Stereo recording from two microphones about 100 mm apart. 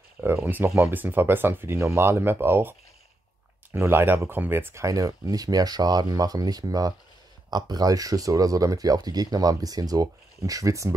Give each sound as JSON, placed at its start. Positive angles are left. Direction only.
{"t": 0.2, "sound": "speech", "side_deg": -20}
{"t": 3.7, "sound": "speech", "side_deg": -25}